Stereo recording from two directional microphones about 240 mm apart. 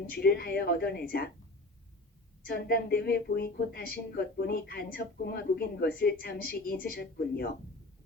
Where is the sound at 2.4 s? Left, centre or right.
Left.